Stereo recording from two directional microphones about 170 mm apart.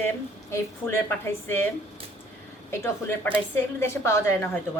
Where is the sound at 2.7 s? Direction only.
15° left (ahead or behind).